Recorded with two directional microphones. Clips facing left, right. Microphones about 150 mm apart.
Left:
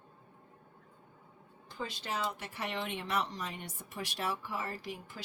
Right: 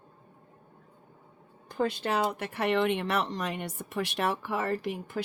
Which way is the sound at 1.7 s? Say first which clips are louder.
Right 10 dB; 55° right (ahead or behind).